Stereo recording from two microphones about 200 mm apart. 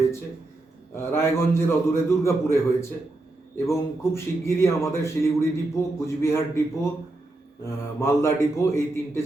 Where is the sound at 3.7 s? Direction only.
15° left (ahead or behind).